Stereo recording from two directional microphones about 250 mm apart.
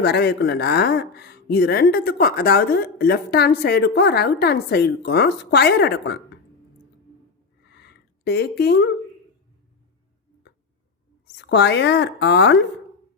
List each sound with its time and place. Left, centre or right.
0.0 s speech: left
7.7 s a sound: left
11.3 s speech: left